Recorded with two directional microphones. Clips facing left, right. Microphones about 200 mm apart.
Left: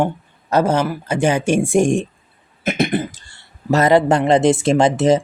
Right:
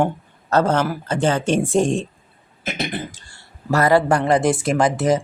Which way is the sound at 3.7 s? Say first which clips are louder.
Left 3 dB; 20° left (ahead or behind).